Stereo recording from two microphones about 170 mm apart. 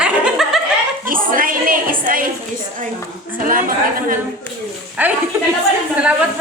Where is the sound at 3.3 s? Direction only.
55° right (ahead or behind).